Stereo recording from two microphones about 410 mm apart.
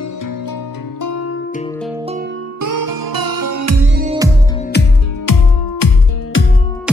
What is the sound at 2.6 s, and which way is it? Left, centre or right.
Music, right.